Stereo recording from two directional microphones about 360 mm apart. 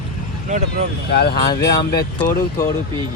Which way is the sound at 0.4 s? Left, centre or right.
Centre.